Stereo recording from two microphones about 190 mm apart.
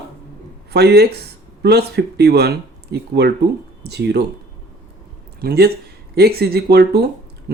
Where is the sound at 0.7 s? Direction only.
60° right (ahead or behind).